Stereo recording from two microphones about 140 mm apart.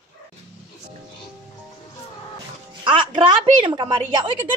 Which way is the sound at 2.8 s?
35° right (ahead or behind).